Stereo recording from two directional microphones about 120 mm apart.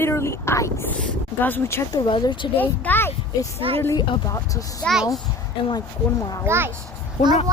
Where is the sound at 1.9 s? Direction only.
35° left (ahead or behind).